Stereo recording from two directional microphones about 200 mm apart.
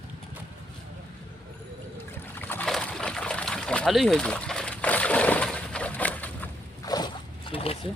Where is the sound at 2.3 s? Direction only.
10° left (ahead or behind).